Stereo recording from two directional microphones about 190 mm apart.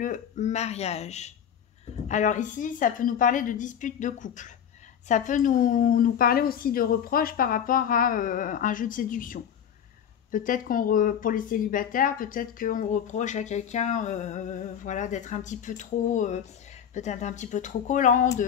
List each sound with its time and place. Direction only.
0.0 s speech: 40° left (ahead or behind)